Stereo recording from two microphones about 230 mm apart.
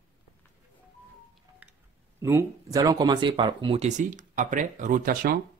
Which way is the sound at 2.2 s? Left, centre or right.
Centre.